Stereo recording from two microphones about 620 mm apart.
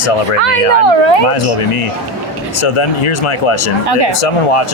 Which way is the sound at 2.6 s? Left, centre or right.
Left.